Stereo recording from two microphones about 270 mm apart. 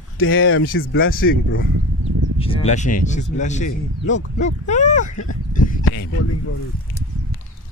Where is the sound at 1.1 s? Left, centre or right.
Left.